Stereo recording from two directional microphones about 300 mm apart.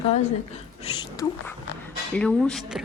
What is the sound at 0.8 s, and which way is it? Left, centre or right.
Cat, centre.